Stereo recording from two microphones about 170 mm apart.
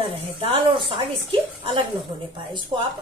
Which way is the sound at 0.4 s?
30° right (ahead or behind).